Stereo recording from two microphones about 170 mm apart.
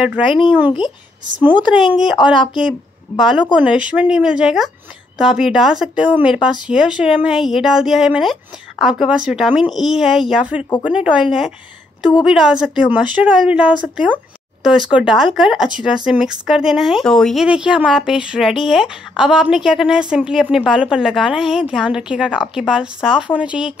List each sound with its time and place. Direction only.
0.0 s speech: 5° right (ahead or behind)
3.2 s speech: centre (ahead or behind)